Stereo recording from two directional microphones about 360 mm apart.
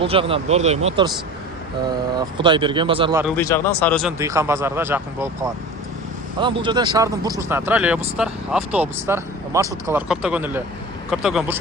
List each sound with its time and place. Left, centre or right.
0.0 s a man's voice: centre
2.1 s a man's voice: centre
3.3 s speech: centre
4.2 s a man's voice: centre